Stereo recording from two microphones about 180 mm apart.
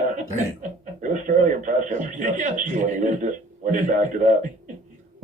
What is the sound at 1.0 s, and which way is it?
Speech, 45° right (ahead or behind).